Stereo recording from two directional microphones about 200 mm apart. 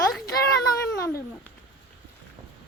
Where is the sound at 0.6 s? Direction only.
15° left (ahead or behind).